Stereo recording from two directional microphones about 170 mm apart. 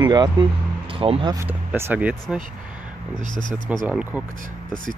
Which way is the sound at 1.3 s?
15° right (ahead or behind).